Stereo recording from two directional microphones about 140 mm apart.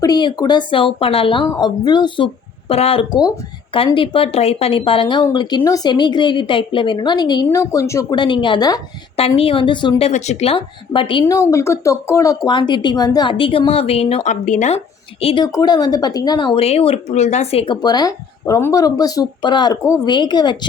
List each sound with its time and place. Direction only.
0.0 s speech: 30° left (ahead or behind)
1.5 s speech: 30° left (ahead or behind)
9.1 s speech: 45° left (ahead or behind)
10.0 s speech: 55° left (ahead or behind); by 11.3 s 35° left (ahead or behind)
11.3 s speech: 20° left (ahead or behind)
12.5 s speech: 35° left (ahead or behind)
14.4 s speech: 60° left (ahead or behind)
15.2 s speech: 45° left (ahead or behind)
15.5 s speech: 30° left (ahead or behind)
16.6 s speech: 45° left (ahead or behind)
17.8 s speech: 30° left (ahead or behind)